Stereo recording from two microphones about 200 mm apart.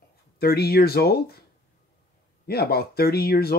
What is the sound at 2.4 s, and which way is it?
Speech, 50° left (ahead or behind).